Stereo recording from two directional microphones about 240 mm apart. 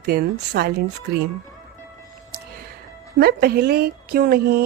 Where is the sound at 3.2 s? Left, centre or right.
Right.